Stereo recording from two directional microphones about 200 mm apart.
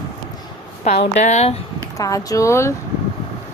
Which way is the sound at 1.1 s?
35° left (ahead or behind).